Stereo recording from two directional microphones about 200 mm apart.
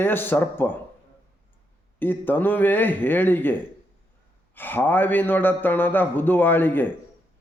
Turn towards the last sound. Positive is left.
turn(degrees=10)  # may be behind; listen again after turning